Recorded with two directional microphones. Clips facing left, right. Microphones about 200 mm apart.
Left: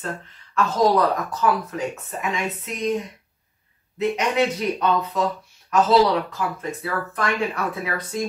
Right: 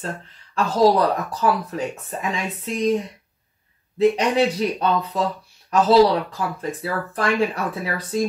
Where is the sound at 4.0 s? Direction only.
30° right (ahead or behind).